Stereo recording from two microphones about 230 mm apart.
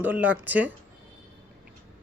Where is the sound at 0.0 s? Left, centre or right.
Centre.